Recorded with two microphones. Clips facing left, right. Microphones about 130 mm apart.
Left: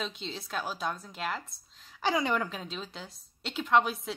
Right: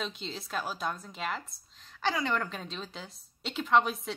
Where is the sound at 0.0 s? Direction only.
Centre (ahead or behind).